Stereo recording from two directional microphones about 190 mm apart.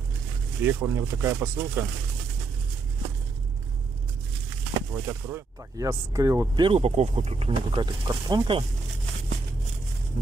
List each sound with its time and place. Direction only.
0.6 s speech: 15° right (ahead or behind)
4.7 s speech: 15° right (ahead or behind)